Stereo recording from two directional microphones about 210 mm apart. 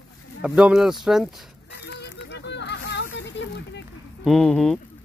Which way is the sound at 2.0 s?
55° left (ahead or behind).